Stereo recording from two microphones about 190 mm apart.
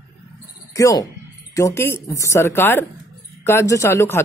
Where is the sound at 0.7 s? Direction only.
15° left (ahead or behind).